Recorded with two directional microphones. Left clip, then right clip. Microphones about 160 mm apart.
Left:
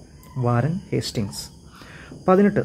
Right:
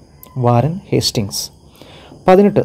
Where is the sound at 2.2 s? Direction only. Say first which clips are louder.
Right 8 dB; 25° right (ahead or behind).